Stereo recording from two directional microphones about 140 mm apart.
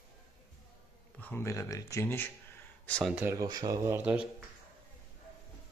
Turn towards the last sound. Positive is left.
turn(degrees=-10)  # may be behind; listen again after turning